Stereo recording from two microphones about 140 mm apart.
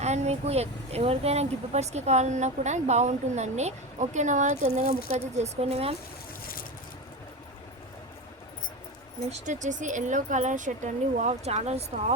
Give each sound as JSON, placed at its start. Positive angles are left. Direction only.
{"t": 0.0, "sound": "speech", "side_deg": -50}
{"t": 5.1, "sound": "speech", "side_deg": -50}
{"t": 9.5, "sound": "speech", "side_deg": -60}